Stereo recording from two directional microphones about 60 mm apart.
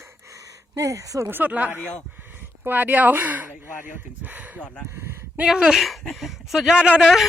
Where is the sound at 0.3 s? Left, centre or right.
Right.